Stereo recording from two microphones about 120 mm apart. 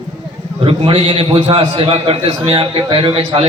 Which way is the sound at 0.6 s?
45° right (ahead or behind).